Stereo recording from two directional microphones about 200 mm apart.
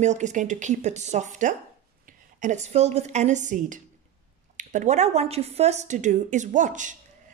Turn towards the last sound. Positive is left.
turn(degrees=-40)  # may be behind; listen again after turning